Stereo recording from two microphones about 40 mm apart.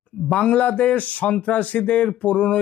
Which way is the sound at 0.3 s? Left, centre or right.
Left.